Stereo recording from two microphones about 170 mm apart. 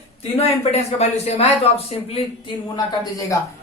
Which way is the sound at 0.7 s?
40° left (ahead or behind).